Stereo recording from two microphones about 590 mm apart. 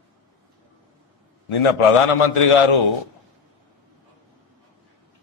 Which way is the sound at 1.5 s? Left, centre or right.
Left.